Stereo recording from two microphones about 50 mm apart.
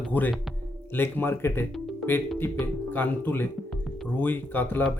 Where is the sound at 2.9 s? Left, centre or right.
Left.